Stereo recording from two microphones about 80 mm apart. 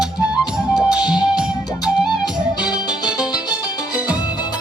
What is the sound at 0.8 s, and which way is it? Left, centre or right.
Music, centre.